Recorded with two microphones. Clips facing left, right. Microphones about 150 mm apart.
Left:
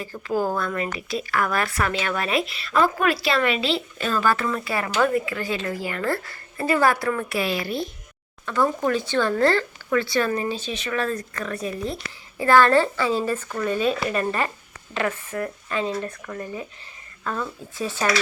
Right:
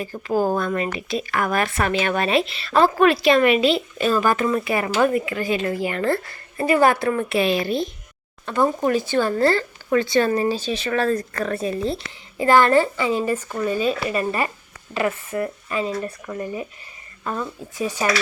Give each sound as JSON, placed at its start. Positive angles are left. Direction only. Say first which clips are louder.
{"t": 0.0, "sound": "speech", "louder": "right 3 dB", "side_deg": -20}
{"t": 9.9, "sound": "speech", "louder": "right 4 dB", "side_deg": -25}
{"t": 10.2, "sound": "speech", "louder": "right 5 dB", "side_deg": -35}
{"t": 12.4, "sound": "speech", "louder": "right 1 dB", "side_deg": -15}
{"t": 15.3, "sound": "speech", "louder": "right 5 dB", "side_deg": -20}
{"t": 15.7, "sound": "speech", "louder": "even", "side_deg": -5}